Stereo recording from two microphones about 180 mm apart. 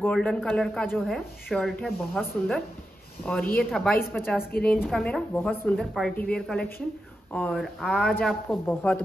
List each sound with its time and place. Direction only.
0.0 s speech: 5° left (ahead or behind)